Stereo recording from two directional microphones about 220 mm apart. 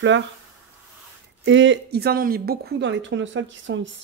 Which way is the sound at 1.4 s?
60° right (ahead or behind).